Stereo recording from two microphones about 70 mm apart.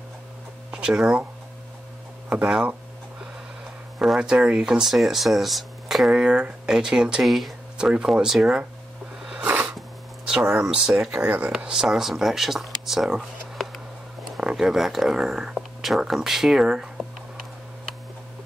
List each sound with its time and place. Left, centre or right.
0.7 s a sound: centre
2.2 s a sound: right
4.2 s speech: centre
7.2 s speech: centre
7.7 s speech: centre
9.2 s a sound: centre
10.7 s speech: centre
11.1 s speech: right
11.6 s speech: centre